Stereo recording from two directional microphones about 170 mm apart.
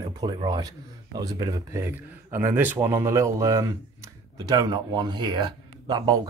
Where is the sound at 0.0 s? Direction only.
25° right (ahead or behind).